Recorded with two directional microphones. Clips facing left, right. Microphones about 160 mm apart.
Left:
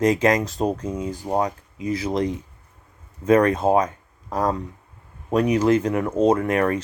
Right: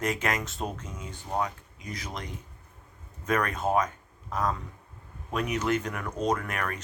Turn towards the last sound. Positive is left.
turn(degrees=30)  # may be behind; listen again after turning